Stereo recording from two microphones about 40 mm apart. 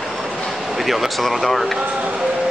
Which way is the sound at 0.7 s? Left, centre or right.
Centre.